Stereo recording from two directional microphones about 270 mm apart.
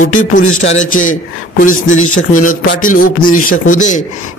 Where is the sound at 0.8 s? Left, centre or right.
Left.